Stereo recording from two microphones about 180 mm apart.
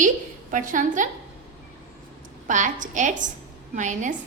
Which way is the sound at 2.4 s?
45° right (ahead or behind).